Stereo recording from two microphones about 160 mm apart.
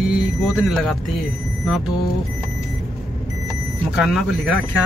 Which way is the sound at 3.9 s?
Centre (ahead or behind).